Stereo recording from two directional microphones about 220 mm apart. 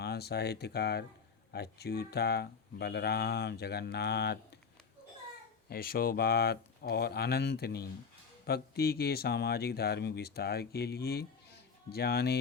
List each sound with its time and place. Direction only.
0.0 s speech: 45° left (ahead or behind)
5.6 s speech: 45° left (ahead or behind)